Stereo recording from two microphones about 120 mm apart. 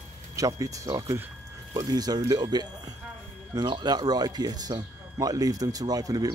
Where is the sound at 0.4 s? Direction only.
30° right (ahead or behind).